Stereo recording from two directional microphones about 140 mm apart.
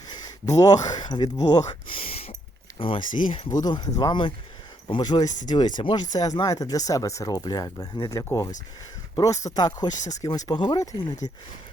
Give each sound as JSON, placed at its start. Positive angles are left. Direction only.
{"t": 0.1, "sound": "speech", "side_deg": 25}
{"t": 2.0, "sound": "a sound", "side_deg": 40}
{"t": 2.7, "sound": "speech", "side_deg": 40}
{"t": 10.0, "sound": "speech", "side_deg": 55}
{"t": 10.2, "sound": "speech", "side_deg": 25}